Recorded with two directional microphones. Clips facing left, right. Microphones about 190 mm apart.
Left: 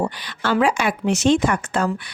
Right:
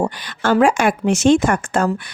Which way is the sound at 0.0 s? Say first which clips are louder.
Right 4 dB; 45° right (ahead or behind).